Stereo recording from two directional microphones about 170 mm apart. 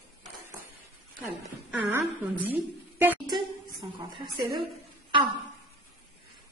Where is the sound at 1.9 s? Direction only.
10° right (ahead or behind).